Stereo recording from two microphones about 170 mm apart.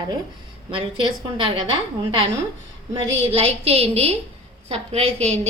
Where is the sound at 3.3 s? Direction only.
35° right (ahead or behind).